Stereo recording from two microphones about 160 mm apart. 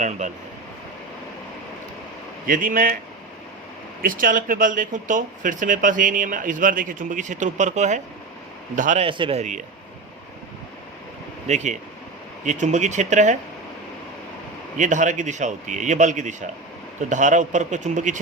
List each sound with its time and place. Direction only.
0.0 s a man's voice: 50° right (ahead or behind)
2.5 s speech: 55° right (ahead or behind)
4.0 s speech: 60° right (ahead or behind)
9.0 s speech: 30° right (ahead or behind)
9.4 s a man's voice: 50° right (ahead or behind)
11.4 s a man's voice: 45° right (ahead or behind)
14.8 s a man's voice: 50° right (ahead or behind)